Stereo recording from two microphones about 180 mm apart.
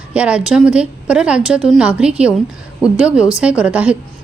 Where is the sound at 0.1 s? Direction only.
5° right (ahead or behind).